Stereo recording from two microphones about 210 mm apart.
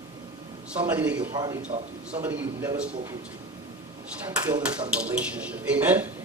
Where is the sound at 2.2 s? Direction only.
10° right (ahead or behind).